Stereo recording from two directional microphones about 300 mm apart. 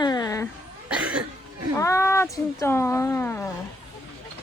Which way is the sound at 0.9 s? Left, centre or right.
Centre.